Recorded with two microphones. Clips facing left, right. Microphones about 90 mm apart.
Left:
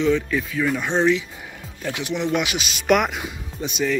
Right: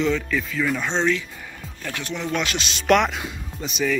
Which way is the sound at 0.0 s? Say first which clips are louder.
Left 2 dB; 5° left (ahead or behind).